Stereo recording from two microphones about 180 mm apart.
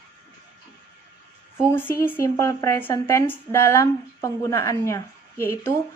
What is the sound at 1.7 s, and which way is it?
Speech, 15° left (ahead or behind).